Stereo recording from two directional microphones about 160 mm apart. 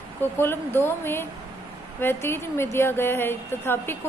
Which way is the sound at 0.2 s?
15° left (ahead or behind).